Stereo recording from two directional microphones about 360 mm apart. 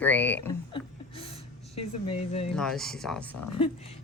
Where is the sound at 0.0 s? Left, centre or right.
Centre.